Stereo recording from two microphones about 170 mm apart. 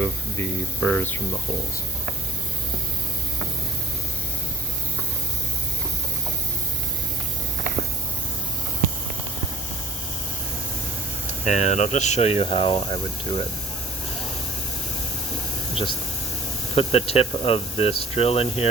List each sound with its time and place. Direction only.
0.0 s spray: 15° left (ahead or behind)
0.8 s speech: 10° left (ahead or behind)
11.4 s speech: 45° left (ahead or behind); by 13.4 s 25° left (ahead or behind)
16.7 s speech: 35° left (ahead or behind)